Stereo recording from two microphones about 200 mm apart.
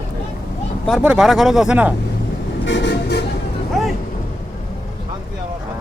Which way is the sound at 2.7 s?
60° left (ahead or behind).